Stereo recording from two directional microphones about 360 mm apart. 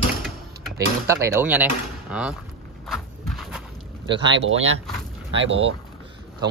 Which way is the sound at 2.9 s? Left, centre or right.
Centre.